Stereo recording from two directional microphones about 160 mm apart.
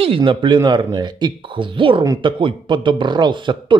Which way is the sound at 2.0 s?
20° right (ahead or behind).